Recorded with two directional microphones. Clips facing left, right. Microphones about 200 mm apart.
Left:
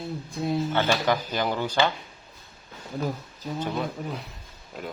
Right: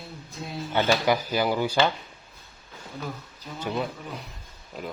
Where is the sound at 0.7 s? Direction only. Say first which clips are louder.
Right 6 dB; 10° right (ahead or behind).